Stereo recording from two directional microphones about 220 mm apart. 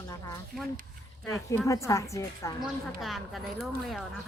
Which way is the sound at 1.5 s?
15° left (ahead or behind).